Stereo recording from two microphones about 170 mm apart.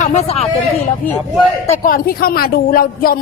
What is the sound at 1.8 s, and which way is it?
Speech, 60° left (ahead or behind).